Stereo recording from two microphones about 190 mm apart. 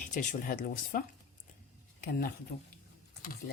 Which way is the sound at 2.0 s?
55° left (ahead or behind).